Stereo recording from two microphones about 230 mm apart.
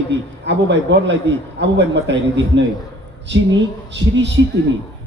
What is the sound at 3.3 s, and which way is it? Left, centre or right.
Speech, right.